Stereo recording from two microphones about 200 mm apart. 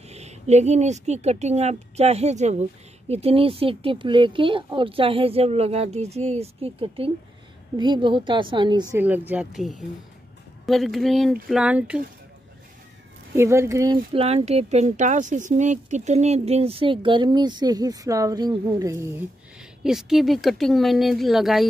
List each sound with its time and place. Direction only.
0.1 s speech: 35° right (ahead or behind)
8.9 s speech: 10° right (ahead or behind)
13.4 s speech: 15° right (ahead or behind)
14.1 s speech: 30° right (ahead or behind); by 19.2 s 15° right (ahead or behind)
19.8 s speech: centre (ahead or behind)